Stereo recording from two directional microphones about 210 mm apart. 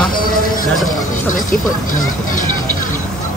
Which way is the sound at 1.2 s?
40° left (ahead or behind).